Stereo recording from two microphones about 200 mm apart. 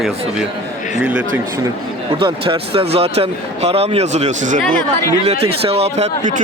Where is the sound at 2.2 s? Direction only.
25° right (ahead or behind).